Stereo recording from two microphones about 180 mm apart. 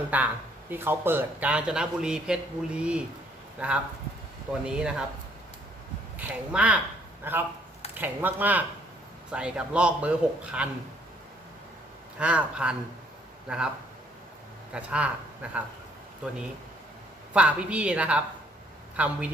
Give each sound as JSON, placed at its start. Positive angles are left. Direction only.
{"t": 0.1, "sound": "a man's voice", "side_deg": -10}
{"t": 6.1, "sound": "a man's voice", "side_deg": -5}
{"t": 12.2, "sound": "a man's voice", "side_deg": -5}
{"t": 14.7, "sound": "a man's voice", "side_deg": -5}